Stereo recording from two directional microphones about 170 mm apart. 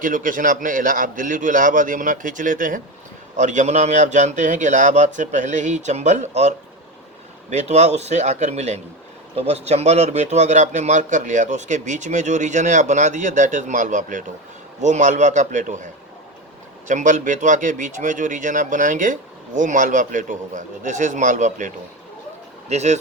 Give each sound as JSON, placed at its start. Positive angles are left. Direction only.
{"t": 0.0, "sound": "a man's voice", "side_deg": -50}
{"t": 7.5, "sound": "a man's voice", "side_deg": -40}
{"t": 16.9, "sound": "a man's voice", "side_deg": -45}
{"t": 22.7, "sound": "speech", "side_deg": -40}